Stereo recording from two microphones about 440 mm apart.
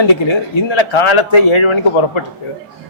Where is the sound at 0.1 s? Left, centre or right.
Left.